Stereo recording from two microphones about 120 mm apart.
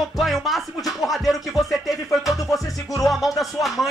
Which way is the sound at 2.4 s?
30° left (ahead or behind).